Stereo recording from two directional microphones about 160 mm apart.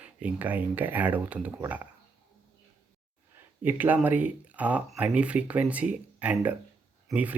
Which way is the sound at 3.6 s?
10° right (ahead or behind).